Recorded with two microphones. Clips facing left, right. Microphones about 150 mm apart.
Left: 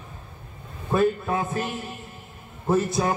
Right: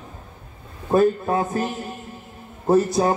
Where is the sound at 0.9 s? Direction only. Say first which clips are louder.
Right 4 dB; 35° right (ahead or behind).